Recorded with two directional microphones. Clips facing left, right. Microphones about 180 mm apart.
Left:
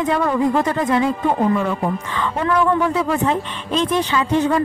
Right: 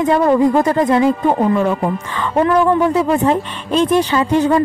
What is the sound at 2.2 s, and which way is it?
Speech, 30° right (ahead or behind).